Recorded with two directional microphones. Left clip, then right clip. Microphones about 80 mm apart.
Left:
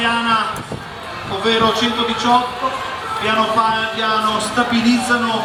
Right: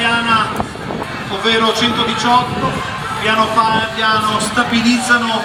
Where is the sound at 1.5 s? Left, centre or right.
Right.